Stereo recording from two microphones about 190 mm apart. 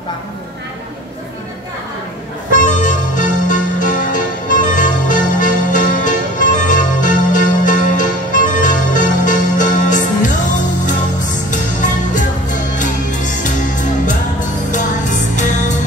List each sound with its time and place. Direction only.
2.6 s music: 40° left (ahead or behind)
14.7 s music: 40° left (ahead or behind)